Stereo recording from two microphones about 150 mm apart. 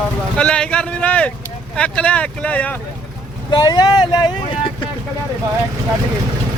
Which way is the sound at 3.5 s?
25° left (ahead or behind).